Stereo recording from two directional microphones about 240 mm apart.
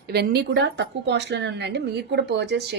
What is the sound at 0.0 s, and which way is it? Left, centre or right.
Speech, right.